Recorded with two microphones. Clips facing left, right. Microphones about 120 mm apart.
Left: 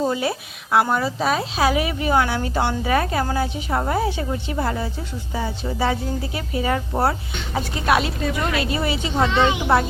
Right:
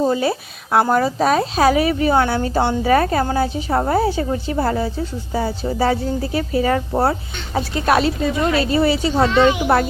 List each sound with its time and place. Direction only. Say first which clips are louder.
0.1 s a woman's voice: right 4 dB; 30° right (ahead or behind)
9.3 s speech: right 5 dB; 20° left (ahead or behind)